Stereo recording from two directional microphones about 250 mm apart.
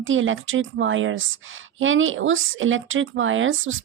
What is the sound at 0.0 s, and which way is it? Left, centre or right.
A woman's voice, right.